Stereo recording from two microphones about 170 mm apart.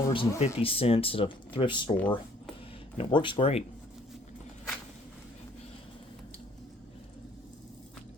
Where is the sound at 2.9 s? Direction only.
30° left (ahead or behind).